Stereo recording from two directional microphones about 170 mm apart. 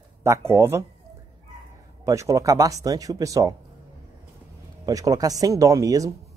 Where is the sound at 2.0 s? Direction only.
20° right (ahead or behind).